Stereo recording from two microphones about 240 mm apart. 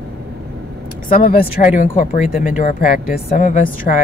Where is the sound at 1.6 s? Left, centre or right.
Left.